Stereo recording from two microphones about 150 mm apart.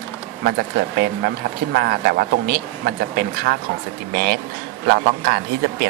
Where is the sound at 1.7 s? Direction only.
90° right.